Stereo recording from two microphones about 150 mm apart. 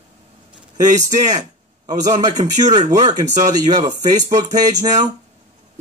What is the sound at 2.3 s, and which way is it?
A man's voice, 55° right (ahead or behind).